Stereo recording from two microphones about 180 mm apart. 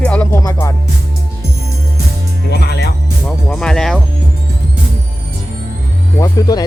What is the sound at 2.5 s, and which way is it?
Music, 65° left (ahead or behind).